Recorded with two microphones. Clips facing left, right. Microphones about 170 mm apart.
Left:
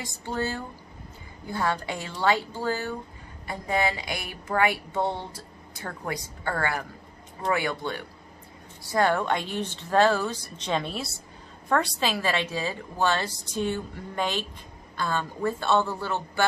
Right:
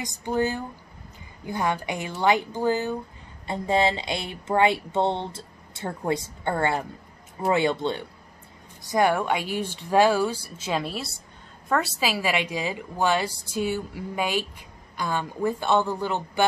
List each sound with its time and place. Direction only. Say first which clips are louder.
0.0 s a woman's voice: right 5 dB; 15° right (ahead or behind)